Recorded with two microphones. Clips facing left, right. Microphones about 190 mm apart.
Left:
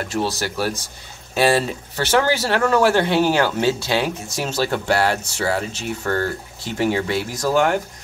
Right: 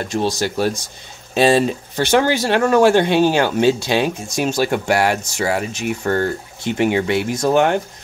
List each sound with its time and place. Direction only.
0.4 s speech: 20° right (ahead or behind)